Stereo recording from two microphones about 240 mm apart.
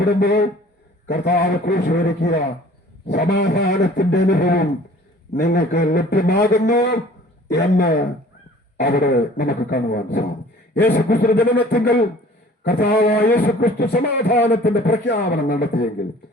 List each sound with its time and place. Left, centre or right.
0.0 s a man's voice: left